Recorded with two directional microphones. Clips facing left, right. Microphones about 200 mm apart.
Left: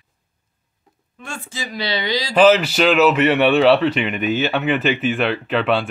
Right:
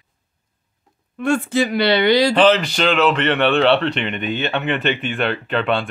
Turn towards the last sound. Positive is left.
turn(degrees=0)  # may be behind; listen again after turning